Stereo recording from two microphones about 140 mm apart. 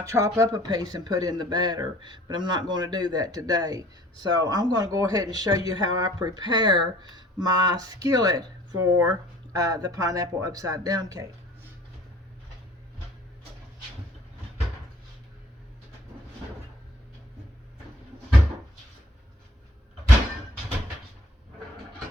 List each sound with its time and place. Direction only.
0.0 s speech: 20° right (ahead or behind)